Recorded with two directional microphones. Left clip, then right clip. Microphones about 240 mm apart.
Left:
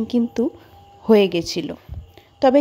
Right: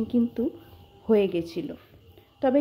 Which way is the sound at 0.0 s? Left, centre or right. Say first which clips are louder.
Left 5 dB; left.